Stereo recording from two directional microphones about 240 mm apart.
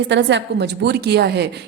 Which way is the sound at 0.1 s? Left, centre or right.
Right.